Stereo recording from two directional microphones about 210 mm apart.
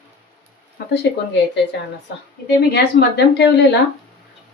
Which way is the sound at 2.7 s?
55° left (ahead or behind).